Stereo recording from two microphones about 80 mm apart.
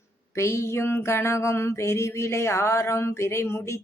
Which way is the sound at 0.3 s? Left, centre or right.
Left.